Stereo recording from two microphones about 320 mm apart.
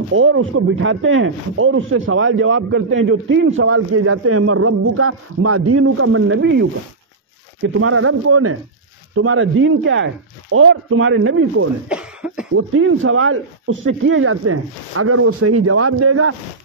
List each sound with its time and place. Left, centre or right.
0.1 s speech: right
7.8 s speech: right
11.9 s cough: centre
12.5 s speech: right